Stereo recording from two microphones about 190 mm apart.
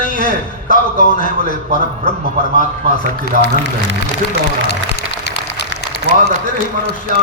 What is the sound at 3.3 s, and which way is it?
Speech, 40° right (ahead or behind).